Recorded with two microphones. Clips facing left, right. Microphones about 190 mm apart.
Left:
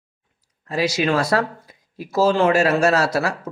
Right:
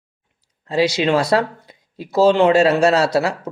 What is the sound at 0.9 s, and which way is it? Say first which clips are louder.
Speech: right 3 dB; 25° right (ahead or behind).